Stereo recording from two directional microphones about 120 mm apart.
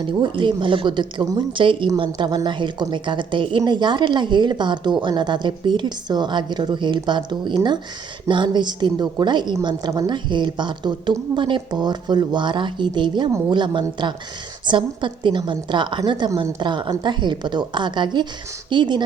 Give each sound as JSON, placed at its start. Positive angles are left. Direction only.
{"t": 0.0, "sound": "a woman's voice", "side_deg": -40}